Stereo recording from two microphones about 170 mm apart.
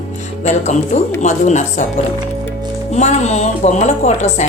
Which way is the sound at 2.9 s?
40° left (ahead or behind).